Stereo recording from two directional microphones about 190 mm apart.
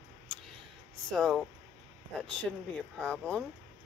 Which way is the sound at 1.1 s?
Centre (ahead or behind).